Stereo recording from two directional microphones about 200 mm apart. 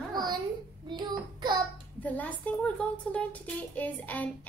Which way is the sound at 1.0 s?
20° right (ahead or behind).